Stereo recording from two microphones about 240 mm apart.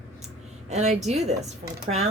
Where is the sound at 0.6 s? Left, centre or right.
Right.